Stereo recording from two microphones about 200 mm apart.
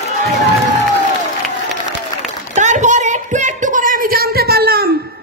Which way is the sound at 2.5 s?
35° right (ahead or behind).